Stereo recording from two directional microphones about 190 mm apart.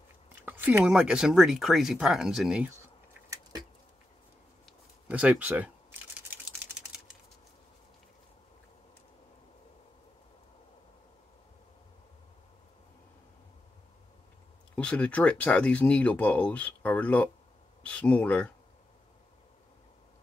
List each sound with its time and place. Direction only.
0.3 s speech: 10° right (ahead or behind)
5.0 s speech: 5° right (ahead or behind)
6.3 s typing: 10° right (ahead or behind)
14.8 s speech: 5° left (ahead or behind)